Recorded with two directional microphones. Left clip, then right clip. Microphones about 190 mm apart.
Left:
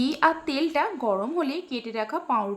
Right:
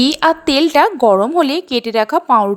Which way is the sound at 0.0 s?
40° right (ahead or behind).